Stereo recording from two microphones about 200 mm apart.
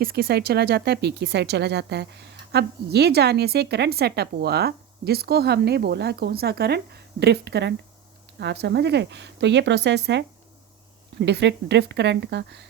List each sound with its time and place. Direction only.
0.0 s a woman's voice: 50° right (ahead or behind)